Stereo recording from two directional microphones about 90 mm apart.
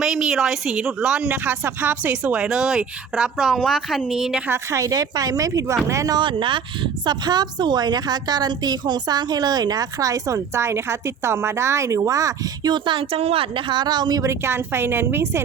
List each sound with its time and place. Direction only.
0.0 s a woman's voice: 5° right (ahead or behind)
1.3 s speech: 20° right (ahead or behind); by 4.4 s 5° right (ahead or behind)
4.4 s speech: 30° right (ahead or behind)
6.1 s a woman's voice: 65° right (ahead or behind); by 12.3 s 40° right (ahead or behind)
12.6 s speech: 60° right (ahead or behind)
14.2 s a woman's voice: 30° right (ahead or behind)